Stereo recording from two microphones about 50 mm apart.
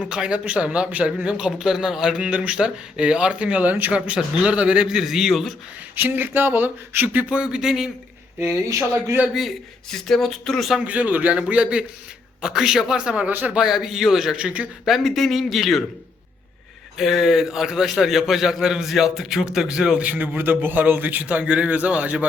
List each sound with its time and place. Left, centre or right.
0.0 s a man's voice: centre
5.0 s speech: centre
6.0 s a man's voice: right
7.3 s a man's voice: centre
9.9 s speech: centre
10.8 s a man's voice: right; by 14.3 s centre
14.3 s a man's voice: right
14.8 s speech: centre
17.0 s a man's voice: centre
20.1 s a man's voice: right